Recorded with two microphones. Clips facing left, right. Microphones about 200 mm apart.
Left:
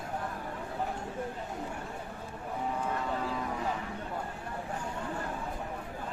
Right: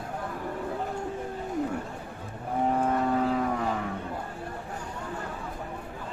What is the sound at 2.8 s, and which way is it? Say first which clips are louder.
Vehicle: right 8 dB; 60° right (ahead or behind).